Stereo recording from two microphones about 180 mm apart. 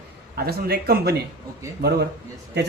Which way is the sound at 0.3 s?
60° right (ahead or behind).